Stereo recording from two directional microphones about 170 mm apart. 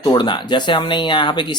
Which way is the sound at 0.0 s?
25° left (ahead or behind).